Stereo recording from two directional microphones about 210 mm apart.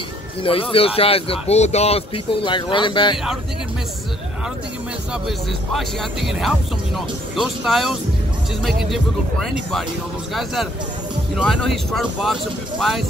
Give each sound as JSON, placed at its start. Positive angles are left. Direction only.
{"t": 0.4, "sound": "a man's voice", "side_deg": 25}
{"t": 5.7, "sound": "speech", "side_deg": 0}
{"t": 10.3, "sound": "speech", "side_deg": 0}